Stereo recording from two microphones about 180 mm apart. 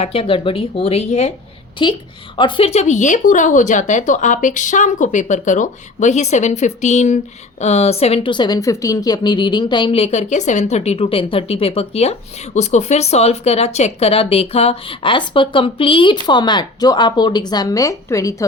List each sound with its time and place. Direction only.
0.0 s a woman's voice: 30° left (ahead or behind)